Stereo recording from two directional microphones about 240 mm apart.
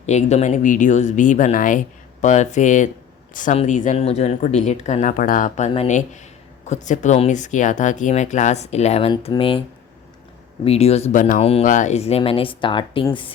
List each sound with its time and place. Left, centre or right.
0.0 s speech: left